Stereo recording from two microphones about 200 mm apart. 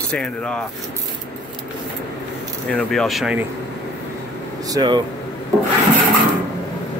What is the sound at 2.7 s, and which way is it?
Speech, 5° left (ahead or behind).